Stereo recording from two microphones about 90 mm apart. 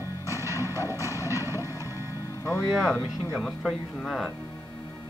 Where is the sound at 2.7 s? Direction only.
5° right (ahead or behind).